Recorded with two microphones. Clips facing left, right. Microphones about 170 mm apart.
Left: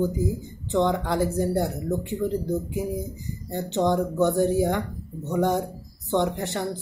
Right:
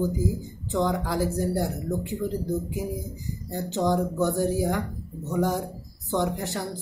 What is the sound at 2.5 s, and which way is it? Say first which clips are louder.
Speech: left 2 dB; 20° left (ahead or behind).